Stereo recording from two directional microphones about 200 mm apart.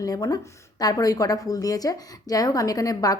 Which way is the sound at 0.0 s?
20° left (ahead or behind).